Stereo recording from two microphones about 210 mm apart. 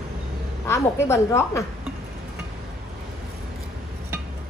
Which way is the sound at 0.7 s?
15° left (ahead or behind).